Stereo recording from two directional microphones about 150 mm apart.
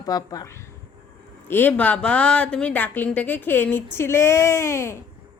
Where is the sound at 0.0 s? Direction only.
25° left (ahead or behind).